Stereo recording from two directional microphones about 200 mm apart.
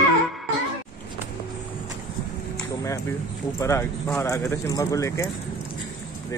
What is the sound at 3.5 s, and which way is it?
Speech, 15° left (ahead or behind).